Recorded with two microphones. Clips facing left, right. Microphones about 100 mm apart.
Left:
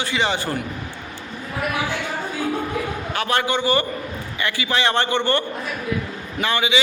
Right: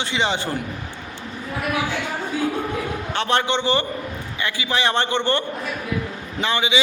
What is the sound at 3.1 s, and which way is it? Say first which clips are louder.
A man's voice: right 1 dB; 25° right (ahead or behind).